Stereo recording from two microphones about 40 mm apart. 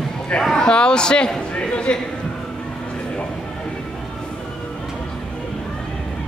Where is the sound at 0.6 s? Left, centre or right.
Left.